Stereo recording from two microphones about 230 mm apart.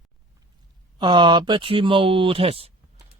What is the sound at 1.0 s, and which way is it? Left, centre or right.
Speech, centre.